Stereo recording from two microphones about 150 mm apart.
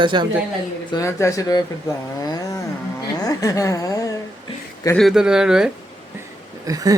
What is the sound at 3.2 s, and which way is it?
Speech, 20° left (ahead or behind).